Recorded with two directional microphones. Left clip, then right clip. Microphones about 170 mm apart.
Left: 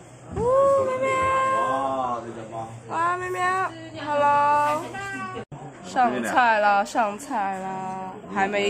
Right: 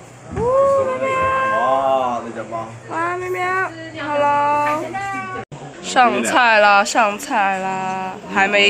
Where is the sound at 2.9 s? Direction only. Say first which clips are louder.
Right 3 dB; 10° right (ahead or behind).